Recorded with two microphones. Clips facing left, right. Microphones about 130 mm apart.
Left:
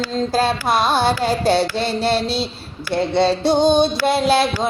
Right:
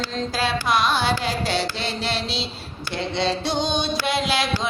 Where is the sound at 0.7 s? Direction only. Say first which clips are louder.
Left 4 dB; 45° left (ahead or behind).